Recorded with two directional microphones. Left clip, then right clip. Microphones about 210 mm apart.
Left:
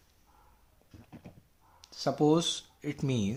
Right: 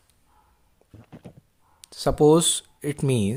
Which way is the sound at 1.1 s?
50° right (ahead or behind).